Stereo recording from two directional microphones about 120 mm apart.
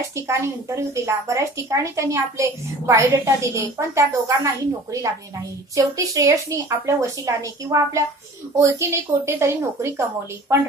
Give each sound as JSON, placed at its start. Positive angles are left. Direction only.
{"t": 0.1, "sound": "a child's voice", "side_deg": -25}
{"t": 5.8, "sound": "a child's voice", "side_deg": -30}